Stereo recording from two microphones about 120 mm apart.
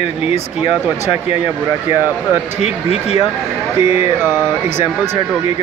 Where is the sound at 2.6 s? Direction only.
60° left (ahead or behind).